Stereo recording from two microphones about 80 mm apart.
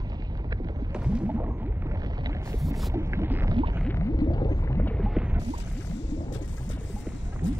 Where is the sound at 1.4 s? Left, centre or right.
Right.